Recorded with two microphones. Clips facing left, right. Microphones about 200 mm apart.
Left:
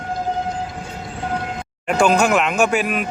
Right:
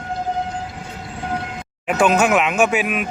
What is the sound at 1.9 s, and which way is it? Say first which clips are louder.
Speech: even; 5° right (ahead or behind).